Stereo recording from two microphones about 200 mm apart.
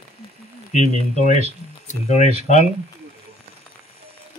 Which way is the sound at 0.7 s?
35° left (ahead or behind).